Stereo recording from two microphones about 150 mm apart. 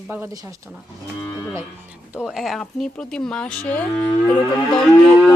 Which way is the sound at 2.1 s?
5° right (ahead or behind).